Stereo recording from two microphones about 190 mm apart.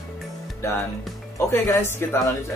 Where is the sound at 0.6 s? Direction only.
15° left (ahead or behind).